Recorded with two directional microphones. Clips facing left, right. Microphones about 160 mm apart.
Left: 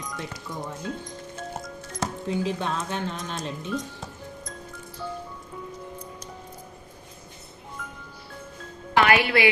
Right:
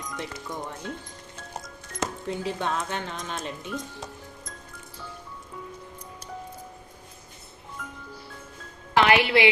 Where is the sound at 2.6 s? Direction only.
15° right (ahead or behind).